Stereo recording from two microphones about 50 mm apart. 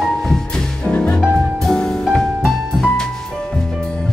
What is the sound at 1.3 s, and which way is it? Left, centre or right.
Music, centre.